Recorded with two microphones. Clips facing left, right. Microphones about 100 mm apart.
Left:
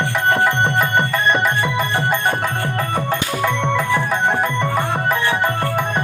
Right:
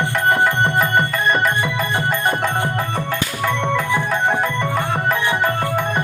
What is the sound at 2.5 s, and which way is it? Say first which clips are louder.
Music: right 1 dB; 20° right (ahead or behind).